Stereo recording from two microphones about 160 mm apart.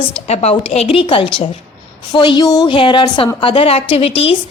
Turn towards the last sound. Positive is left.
turn(degrees=35)  # may be behind; listen again after turning